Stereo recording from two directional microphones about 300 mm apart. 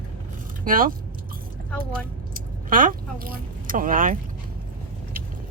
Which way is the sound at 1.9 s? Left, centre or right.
Right.